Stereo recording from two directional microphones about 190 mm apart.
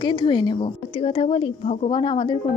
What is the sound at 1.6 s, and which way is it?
Speech, 40° left (ahead or behind).